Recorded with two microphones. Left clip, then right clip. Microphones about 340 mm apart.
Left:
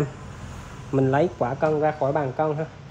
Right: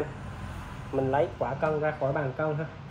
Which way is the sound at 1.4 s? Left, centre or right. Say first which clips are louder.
Left 6 dB; left.